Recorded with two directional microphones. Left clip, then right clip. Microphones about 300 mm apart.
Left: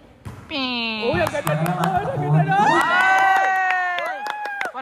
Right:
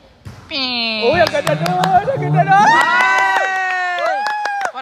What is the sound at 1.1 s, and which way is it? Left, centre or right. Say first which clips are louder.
A man's voice: right 7 dB; right.